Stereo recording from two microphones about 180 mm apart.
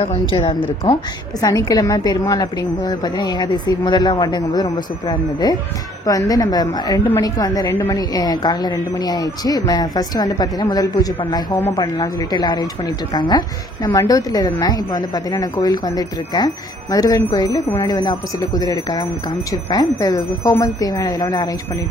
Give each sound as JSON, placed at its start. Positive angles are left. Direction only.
{"t": 0.0, "sound": "a woman's voice", "side_deg": 35}
{"t": 13.8, "sound": "a woman's voice", "side_deg": 20}